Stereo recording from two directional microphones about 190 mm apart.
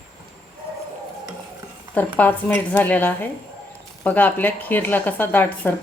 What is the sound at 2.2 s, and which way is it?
Speech, 10° left (ahead or behind).